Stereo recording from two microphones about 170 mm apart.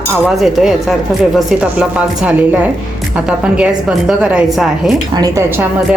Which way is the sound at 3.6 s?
5° right (ahead or behind).